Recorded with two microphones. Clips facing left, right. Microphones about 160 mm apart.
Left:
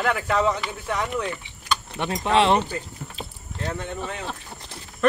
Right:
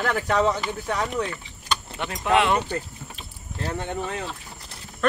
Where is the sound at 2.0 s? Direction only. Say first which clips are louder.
Left 1 dB; 20° left (ahead or behind).